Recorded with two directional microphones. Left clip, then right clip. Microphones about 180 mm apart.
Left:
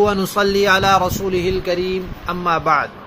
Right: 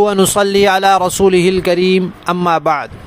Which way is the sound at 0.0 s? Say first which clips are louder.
Right 4 dB; 75° right (ahead or behind).